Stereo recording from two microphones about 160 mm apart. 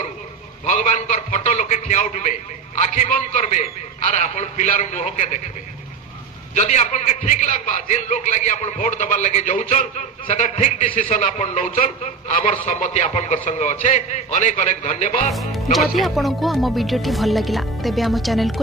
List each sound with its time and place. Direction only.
0.7 s a man's voice: 50° left (ahead or behind)
6.5 s a man's voice: 45° left (ahead or behind)
15.3 s speech: centre (ahead or behind)